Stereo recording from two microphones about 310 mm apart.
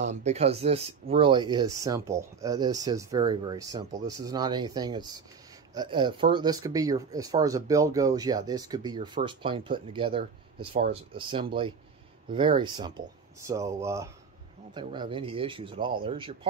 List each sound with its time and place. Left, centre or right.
0.0 s speech: right